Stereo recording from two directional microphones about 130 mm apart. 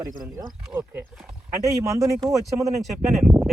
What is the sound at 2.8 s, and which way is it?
Speech, centre (ahead or behind).